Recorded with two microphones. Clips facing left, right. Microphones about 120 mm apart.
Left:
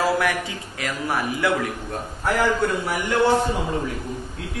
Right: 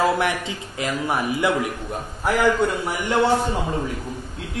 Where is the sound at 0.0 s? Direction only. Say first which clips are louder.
Right 1 dB; 25° right (ahead or behind).